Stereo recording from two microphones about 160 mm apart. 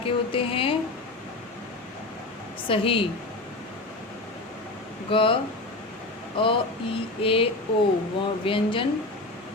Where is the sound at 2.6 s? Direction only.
35° left (ahead or behind).